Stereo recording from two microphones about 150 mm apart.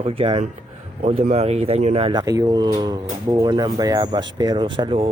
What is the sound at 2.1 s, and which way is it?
Speech, 25° right (ahead or behind).